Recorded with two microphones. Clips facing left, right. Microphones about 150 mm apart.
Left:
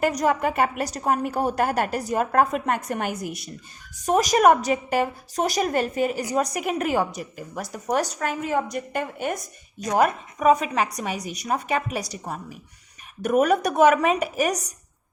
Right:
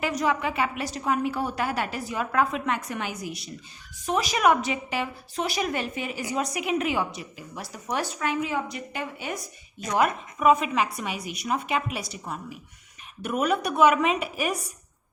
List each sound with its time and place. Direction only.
0.0 s a woman's voice: 45° left (ahead or behind)